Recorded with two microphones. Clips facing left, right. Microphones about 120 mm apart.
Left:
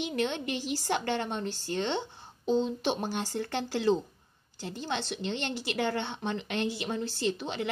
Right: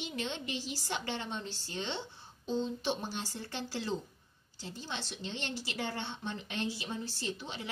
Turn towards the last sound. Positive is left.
turn(degrees=75)  # may be behind; listen again after turning